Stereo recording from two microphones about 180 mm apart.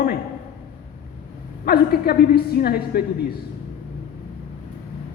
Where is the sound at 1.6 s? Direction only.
60° left (ahead or behind).